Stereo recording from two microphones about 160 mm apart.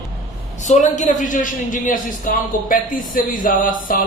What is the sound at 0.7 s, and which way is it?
A man's voice, 50° left (ahead or behind).